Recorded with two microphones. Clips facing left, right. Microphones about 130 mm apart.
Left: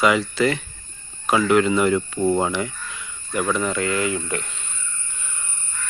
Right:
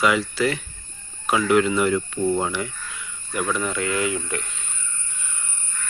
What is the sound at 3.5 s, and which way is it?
Speech, 15° left (ahead or behind).